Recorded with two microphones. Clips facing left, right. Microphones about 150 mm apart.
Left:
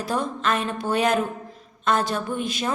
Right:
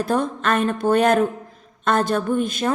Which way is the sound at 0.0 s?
50° right (ahead or behind).